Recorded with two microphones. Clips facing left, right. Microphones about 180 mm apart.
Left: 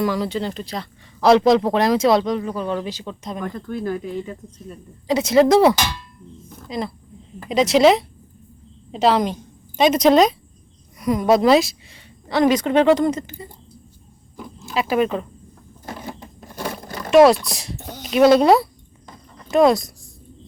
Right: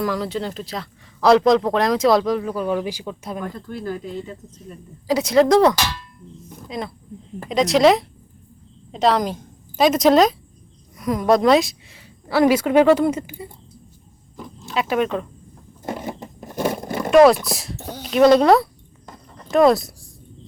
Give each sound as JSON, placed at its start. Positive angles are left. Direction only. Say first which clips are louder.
{"t": 0.0, "sound": "speech", "louder": "left 2 dB", "side_deg": 0}
{"t": 5.0, "sound": "a woman's voice", "louder": "left 1 dB", "side_deg": 0}
{"t": 14.3, "sound": "a sound", "louder": "left 1 dB", "side_deg": 0}
{"t": 16.6, "sound": "roaring cats", "louder": "right 6 dB", "side_deg": -25}
{"t": 17.1, "sound": "speech", "louder": "even", "side_deg": 0}
{"t": 18.0, "sound": "a sound", "louder": "even", "side_deg": 5}